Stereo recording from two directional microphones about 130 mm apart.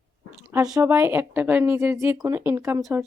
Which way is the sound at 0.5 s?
30° right (ahead or behind).